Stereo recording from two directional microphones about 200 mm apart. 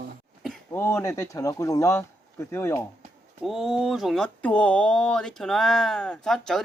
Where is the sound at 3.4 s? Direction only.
Centre (ahead or behind).